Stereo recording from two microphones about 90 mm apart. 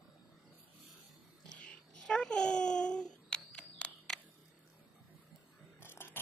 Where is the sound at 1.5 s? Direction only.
10° left (ahead or behind).